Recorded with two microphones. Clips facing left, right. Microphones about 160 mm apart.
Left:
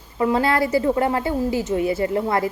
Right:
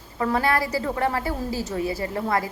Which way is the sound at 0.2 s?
25° left (ahead or behind).